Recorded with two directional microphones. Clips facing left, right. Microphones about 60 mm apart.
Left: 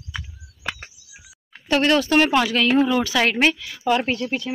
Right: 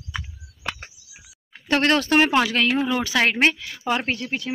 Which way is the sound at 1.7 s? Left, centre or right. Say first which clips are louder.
Left 1 dB; right.